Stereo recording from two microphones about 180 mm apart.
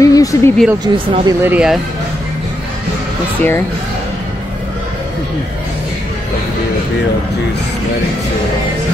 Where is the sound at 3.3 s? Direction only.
10° left (ahead or behind).